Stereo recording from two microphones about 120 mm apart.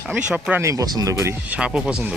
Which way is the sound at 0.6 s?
30° right (ahead or behind).